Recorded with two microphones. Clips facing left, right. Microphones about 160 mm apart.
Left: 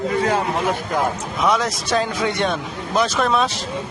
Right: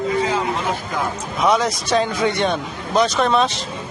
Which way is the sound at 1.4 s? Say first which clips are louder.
Right 2 dB; centre (ahead or behind).